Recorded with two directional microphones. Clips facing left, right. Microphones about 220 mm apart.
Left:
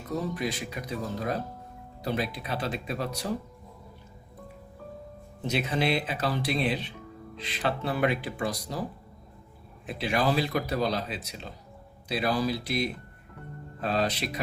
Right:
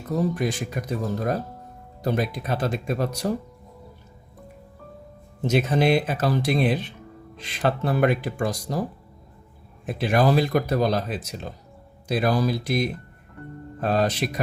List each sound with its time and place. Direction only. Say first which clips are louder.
0.3 s speech: right 5 dB; 45° right (ahead or behind)
5.5 s speech: right 7 dB; 45° right (ahead or behind)
9.8 s speech: right 6 dB; 45° right (ahead or behind)